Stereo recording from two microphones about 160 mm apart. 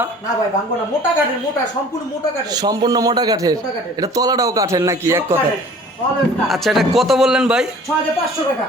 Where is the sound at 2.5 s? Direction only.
25° right (ahead or behind).